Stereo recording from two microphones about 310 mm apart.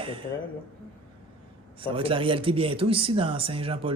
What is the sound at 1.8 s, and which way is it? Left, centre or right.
Speech, centre.